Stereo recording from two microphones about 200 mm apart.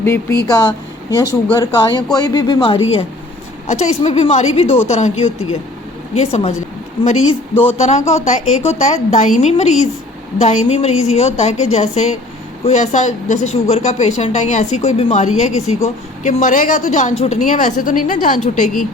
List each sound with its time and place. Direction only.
0.0 s speech: 10° left (ahead or behind); by 5.1 s 35° left (ahead or behind)
6.1 s speech: 30° left (ahead or behind)
7.8 s speech: 35° left (ahead or behind)